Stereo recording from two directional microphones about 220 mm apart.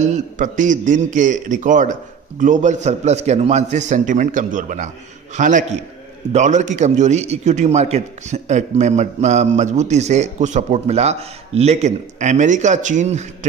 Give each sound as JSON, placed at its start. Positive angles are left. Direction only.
{"t": 0.0, "sound": "a man's voice", "side_deg": -35}